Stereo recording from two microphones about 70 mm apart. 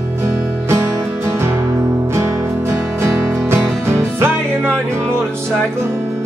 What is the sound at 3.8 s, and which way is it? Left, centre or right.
Music, right.